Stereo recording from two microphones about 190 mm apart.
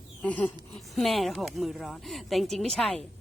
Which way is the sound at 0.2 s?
5° left (ahead or behind).